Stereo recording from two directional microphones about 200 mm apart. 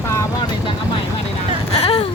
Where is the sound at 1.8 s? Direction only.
30° left (ahead or behind).